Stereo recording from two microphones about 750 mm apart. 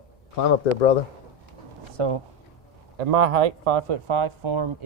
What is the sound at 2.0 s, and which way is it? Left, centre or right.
Speech, right.